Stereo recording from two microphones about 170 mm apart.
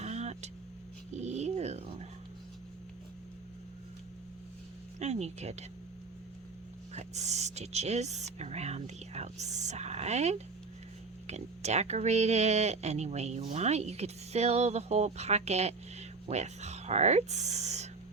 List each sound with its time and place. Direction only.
0.0 s vehicle: 40° right (ahead or behind)
1.1 s dog: 40° right (ahead or behind)
4.9 s speech: 40° right (ahead or behind)
6.9 s speech: 40° right (ahead or behind)